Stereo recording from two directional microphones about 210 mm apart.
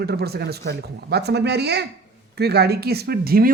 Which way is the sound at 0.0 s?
50° right (ahead or behind).